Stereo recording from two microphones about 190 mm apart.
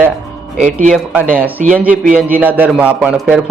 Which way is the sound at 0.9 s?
10° right (ahead or behind).